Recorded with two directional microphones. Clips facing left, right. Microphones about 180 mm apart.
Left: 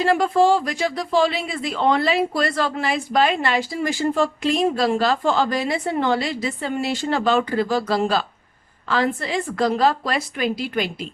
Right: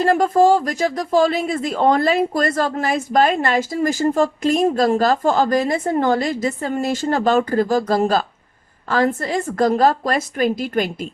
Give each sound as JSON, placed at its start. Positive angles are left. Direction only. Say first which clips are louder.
{"t": 0.0, "sound": "speech", "louder": "right 3 dB", "side_deg": -45}